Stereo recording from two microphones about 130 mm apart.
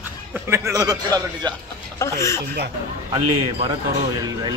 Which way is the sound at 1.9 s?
25° left (ahead or behind).